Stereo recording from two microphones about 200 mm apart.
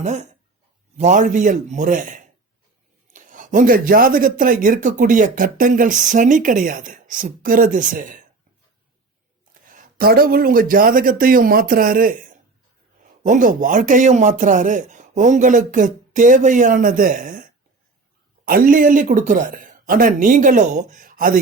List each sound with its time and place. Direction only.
0.0 s a man's voice: 35° right (ahead or behind)
9.6 s a man's voice: 45° right (ahead or behind)